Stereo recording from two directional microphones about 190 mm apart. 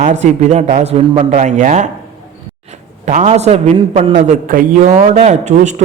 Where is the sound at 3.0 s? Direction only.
35° right (ahead or behind).